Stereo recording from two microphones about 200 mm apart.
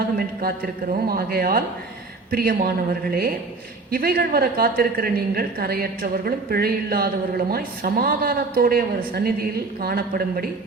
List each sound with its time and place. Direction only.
0.2 s a woman's voice: 50° right (ahead or behind)